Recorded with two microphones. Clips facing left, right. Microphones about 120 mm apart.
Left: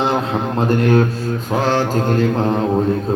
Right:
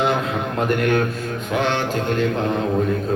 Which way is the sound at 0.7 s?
30° left (ahead or behind).